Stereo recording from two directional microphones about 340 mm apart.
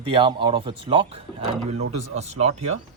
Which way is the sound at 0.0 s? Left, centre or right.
Centre.